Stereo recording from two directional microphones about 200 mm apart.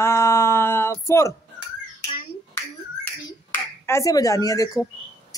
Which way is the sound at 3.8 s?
15° left (ahead or behind).